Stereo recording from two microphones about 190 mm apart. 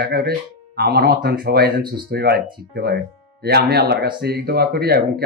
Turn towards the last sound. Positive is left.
turn(degrees=-55)  # may be behind; listen again after turning